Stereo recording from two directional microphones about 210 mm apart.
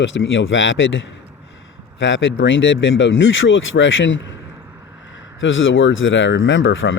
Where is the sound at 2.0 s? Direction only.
65° left (ahead or behind).